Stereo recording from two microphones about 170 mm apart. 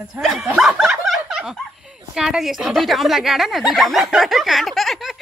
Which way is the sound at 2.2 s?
5° right (ahead or behind).